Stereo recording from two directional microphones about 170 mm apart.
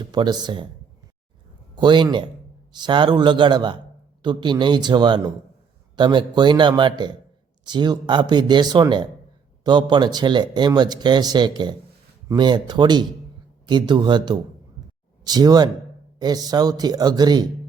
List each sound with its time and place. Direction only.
0.0 s speech: 25° right (ahead or behind)
1.7 s speech: 25° right (ahead or behind)